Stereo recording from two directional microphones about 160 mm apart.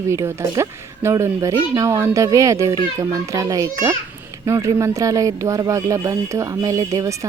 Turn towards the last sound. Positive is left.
turn(degrees=-20)  # may be behind; listen again after turning